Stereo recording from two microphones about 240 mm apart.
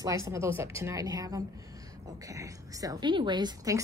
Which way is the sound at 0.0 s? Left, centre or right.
Centre.